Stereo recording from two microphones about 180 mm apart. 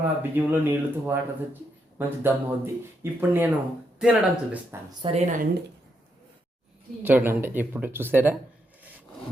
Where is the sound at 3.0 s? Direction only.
10° right (ahead or behind).